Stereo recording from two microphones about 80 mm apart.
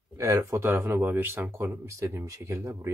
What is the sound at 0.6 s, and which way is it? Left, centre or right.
Speech, right.